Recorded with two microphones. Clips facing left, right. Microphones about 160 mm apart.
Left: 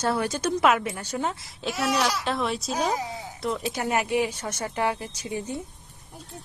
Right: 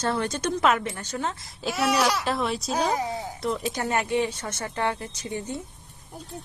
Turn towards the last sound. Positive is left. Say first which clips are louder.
# even
turn(degrees=15)  # may be behind; listen again after turning